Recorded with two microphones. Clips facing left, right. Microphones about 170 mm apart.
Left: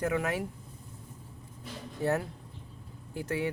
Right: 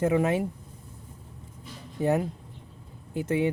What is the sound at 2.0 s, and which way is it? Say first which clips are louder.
Speech: right 5 dB; 15° right (ahead or behind).